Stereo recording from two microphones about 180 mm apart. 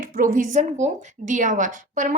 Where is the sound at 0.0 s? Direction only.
45° right (ahead or behind).